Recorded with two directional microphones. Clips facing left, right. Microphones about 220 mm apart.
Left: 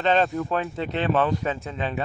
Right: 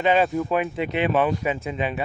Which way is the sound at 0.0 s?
10° right (ahead or behind).